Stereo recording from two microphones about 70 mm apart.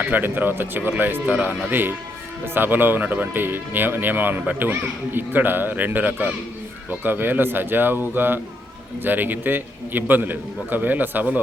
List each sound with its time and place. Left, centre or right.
0.0 s speech: right